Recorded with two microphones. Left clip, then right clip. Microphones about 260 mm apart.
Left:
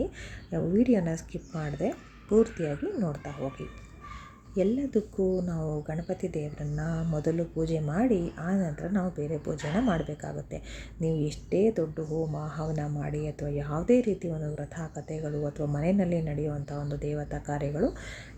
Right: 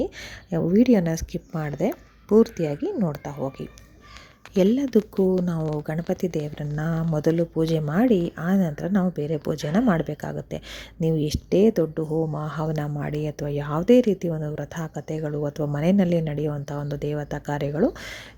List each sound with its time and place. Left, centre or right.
0.0 s speech: right
4.5 s speech: right